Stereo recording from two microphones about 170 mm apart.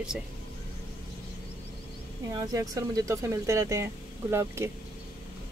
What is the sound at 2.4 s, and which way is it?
Speech, 20° right (ahead or behind).